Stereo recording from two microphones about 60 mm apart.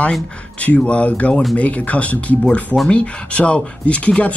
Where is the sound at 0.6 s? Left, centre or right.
Left.